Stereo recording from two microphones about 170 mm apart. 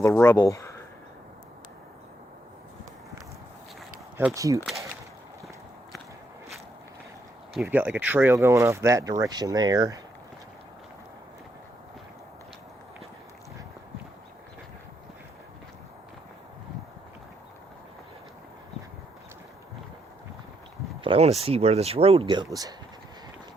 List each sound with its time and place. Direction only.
0.0 s speech: 10° left (ahead or behind)
4.4 s speech: 20° right (ahead or behind)
7.6 s speech: 10° right (ahead or behind)
21.0 s speech: 35° right (ahead or behind)